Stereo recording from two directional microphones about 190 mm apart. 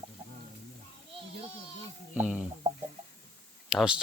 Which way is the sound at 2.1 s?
10° right (ahead or behind).